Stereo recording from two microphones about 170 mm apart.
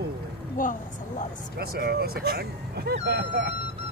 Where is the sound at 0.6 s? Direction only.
50° left (ahead or behind).